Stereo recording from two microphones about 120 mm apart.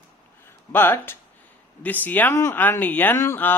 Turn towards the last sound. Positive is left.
turn(degrees=15)  # may be behind; listen again after turning